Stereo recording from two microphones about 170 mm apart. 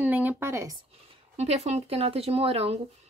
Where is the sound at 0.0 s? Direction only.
10° right (ahead or behind).